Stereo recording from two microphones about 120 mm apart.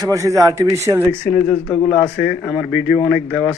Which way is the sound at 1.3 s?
15° left (ahead or behind).